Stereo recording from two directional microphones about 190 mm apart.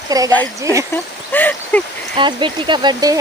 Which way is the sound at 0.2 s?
20° right (ahead or behind).